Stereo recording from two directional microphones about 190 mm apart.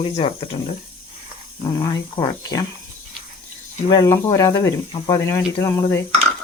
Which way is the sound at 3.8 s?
20° left (ahead or behind).